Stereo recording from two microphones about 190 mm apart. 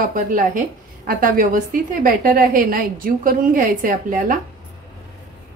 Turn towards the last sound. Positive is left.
turn(degrees=-45)  # may be behind; listen again after turning